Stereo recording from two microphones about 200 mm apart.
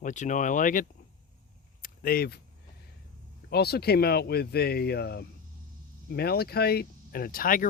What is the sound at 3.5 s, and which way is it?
Speech, 55° left (ahead or behind).